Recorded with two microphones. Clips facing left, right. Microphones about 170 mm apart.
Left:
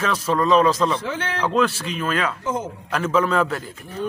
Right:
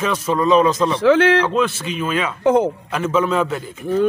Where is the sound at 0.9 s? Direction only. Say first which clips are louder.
Right 14 dB; 90° right.